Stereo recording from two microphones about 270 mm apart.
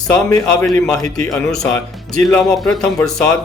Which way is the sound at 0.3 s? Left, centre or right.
Centre.